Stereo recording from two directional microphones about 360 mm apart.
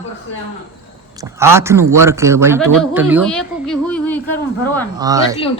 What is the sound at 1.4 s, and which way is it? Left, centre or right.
A woman's voice, centre.